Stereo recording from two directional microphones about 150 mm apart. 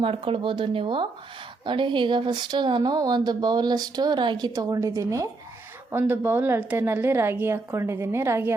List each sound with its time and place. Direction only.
0.0 s a woman's voice: 35° right (ahead or behind); by 8.5 s 15° right (ahead or behind)